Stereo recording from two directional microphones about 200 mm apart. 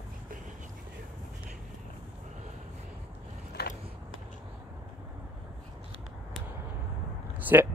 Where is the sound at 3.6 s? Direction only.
55° left (ahead or behind).